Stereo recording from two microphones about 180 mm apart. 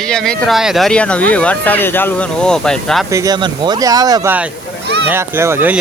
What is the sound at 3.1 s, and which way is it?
Speech, 20° right (ahead or behind).